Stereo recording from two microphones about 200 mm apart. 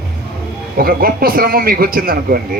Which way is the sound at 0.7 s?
50° right (ahead or behind).